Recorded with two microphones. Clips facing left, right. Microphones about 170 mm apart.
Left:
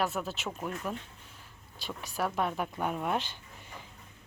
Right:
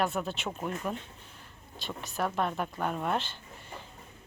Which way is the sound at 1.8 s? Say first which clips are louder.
Right 1 dB; 10° left (ahead or behind).